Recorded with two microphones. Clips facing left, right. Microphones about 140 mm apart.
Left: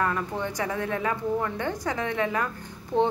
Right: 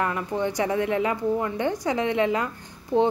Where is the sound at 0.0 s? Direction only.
20° right (ahead or behind).